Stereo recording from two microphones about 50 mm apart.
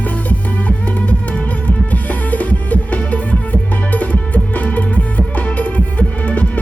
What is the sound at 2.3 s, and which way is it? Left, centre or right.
Music, left.